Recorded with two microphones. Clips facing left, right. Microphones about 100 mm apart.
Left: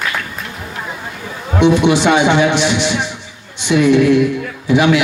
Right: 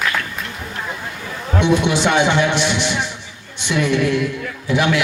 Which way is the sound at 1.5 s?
55° left (ahead or behind).